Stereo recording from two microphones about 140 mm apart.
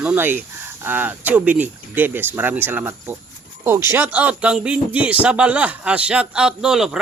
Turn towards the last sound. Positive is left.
turn(degrees=-5)  # may be behind; listen again after turning